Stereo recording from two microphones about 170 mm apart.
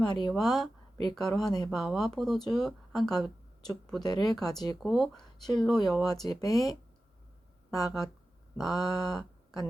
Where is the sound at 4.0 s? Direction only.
25° left (ahead or behind).